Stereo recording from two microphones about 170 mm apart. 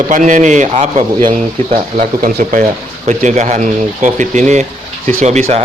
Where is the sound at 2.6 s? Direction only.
45° right (ahead or behind).